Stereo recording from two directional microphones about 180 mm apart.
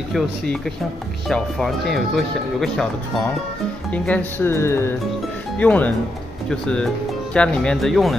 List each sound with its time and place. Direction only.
1.3 s speech: centre (ahead or behind)